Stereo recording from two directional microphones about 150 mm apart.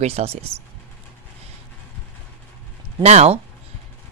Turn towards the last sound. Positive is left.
turn(degrees=-45)  # may be behind; listen again after turning